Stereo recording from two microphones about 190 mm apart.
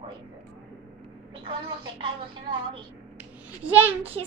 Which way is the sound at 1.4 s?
25° right (ahead or behind).